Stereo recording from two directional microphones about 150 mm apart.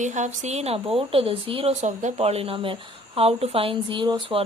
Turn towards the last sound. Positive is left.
turn(degrees=-30)  # may be behind; listen again after turning